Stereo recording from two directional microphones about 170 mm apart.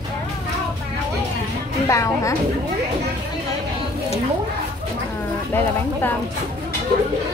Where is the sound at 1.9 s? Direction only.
20° left (ahead or behind).